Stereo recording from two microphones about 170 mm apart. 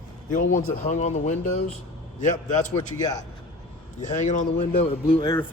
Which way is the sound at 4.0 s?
45° left (ahead or behind).